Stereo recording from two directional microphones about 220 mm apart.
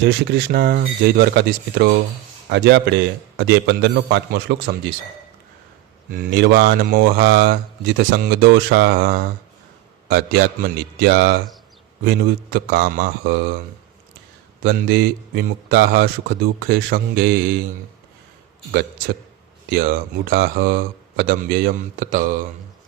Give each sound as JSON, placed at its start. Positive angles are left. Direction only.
{"t": 0.0, "sound": "speech", "side_deg": -50}
{"t": 6.1, "sound": "speech", "side_deg": -45}
{"t": 14.6, "sound": "speech", "side_deg": -45}
{"t": 18.7, "sound": "a man's voice", "side_deg": -45}